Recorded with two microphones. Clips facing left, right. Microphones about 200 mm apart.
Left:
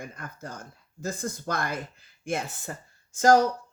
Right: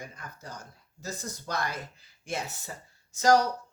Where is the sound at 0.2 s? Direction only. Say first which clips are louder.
Left 4 dB; 50° left (ahead or behind).